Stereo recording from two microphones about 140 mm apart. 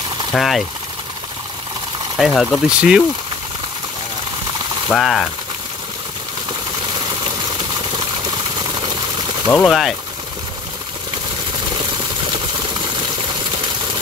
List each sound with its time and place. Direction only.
0.3 s speech: centre (ahead or behind)
2.1 s speech: centre (ahead or behind)
4.8 s speech: 5° left (ahead or behind)
9.7 s speech: centre (ahead or behind)